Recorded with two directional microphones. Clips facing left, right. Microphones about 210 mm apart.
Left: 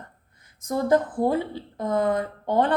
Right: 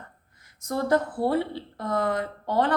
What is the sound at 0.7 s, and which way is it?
Speech, 15° left (ahead or behind).